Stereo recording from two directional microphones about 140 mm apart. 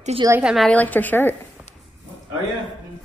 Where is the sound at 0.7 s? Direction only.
10° left (ahead or behind).